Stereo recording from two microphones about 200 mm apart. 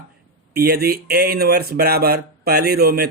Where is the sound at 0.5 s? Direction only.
50° right (ahead or behind).